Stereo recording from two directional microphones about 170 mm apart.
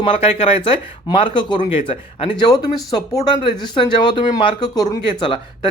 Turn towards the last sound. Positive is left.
turn(degrees=25)  # may be behind; listen again after turning